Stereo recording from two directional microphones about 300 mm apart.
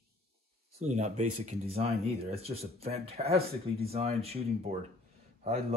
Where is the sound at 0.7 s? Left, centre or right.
Right.